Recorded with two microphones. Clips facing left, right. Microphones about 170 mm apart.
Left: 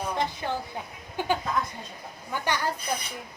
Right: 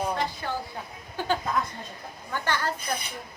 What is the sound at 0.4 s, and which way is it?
A woman's voice, 20° left (ahead or behind).